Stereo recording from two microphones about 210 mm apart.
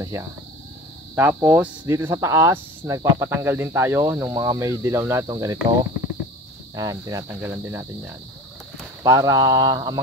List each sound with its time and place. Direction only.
0.1 s speech: 15° right (ahead or behind)
9.0 s speech: 20° right (ahead or behind)